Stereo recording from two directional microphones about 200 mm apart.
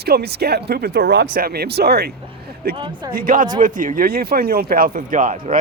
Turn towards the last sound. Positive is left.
turn(degrees=-40)  # may be behind; listen again after turning